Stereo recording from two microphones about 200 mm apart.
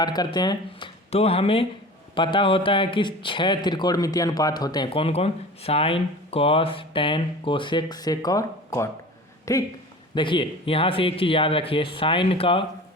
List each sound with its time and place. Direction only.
0.0 s speech: 20° left (ahead or behind)